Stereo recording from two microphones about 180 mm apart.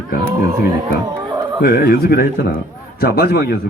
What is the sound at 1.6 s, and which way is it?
A man's voice, 60° left (ahead or behind).